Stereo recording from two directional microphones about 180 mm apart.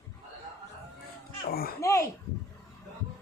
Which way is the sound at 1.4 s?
60° left (ahead or behind).